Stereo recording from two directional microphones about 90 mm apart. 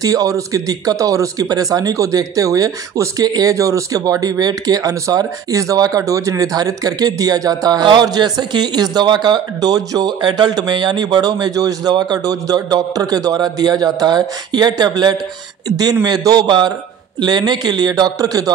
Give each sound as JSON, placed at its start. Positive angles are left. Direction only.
{"t": 0.0, "sound": "a man's voice", "side_deg": -40}